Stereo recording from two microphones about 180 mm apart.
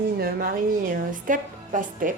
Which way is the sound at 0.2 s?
55° right (ahead or behind).